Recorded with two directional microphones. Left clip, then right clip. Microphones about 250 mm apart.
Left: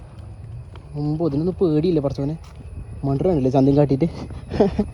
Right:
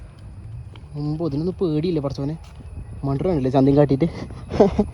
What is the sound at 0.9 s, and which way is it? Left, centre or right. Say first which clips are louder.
Speech: left 3 dB; centre.